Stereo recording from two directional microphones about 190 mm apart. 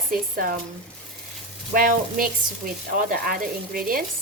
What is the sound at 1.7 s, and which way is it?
Speech, 50° right (ahead or behind).